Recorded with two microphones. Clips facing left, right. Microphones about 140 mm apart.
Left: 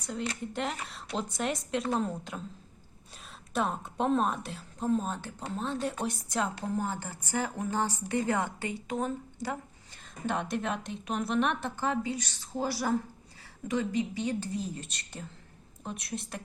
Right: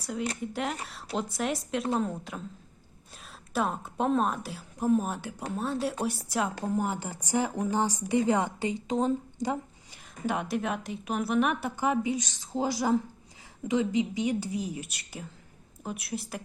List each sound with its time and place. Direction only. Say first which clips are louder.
0.0 s a woman's voice: right 2 dB; 5° right (ahead or behind)
3.5 s a woman's voice: right 1 dB; centre (ahead or behind); by 10.0 s 20° right (ahead or behind)
10.2 s a woman's voice: right 2 dB; 5° right (ahead or behind)